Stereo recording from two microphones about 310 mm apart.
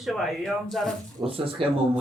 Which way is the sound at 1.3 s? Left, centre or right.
Centre.